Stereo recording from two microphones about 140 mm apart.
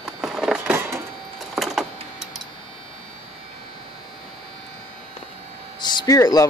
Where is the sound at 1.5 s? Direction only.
5° right (ahead or behind).